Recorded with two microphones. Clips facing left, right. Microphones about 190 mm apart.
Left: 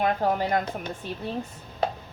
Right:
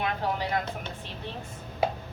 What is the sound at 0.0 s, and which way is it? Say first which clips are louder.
Speech: left 5 dB; 45° left (ahead or behind).